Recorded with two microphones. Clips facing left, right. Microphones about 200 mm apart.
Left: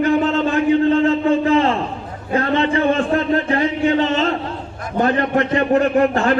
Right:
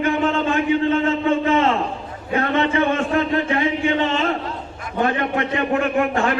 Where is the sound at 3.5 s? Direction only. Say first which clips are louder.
Left 3 dB; 40° left (ahead or behind).